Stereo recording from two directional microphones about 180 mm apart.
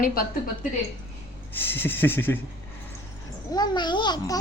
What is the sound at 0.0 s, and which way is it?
Speech, 55° left (ahead or behind).